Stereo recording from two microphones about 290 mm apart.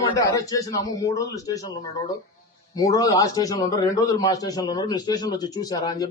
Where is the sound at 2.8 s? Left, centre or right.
Centre.